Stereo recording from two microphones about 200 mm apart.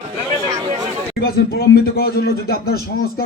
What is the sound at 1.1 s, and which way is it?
Speech, 50° left (ahead or behind).